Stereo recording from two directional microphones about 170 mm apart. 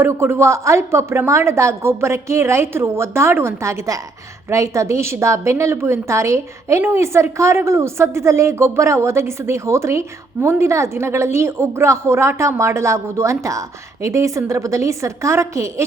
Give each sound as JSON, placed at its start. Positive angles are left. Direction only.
{"t": 0.0, "sound": "a woman's voice", "side_deg": -15}